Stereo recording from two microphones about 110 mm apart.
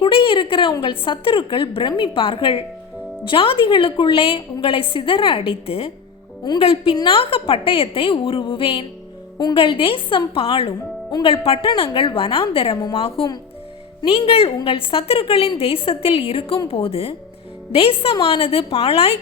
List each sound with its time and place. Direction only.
0.0 s a woman's voice: 50° left (ahead or behind)